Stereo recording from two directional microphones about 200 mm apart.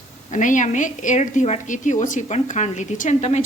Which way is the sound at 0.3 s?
40° left (ahead or behind).